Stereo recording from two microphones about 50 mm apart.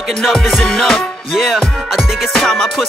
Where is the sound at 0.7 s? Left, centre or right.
Centre.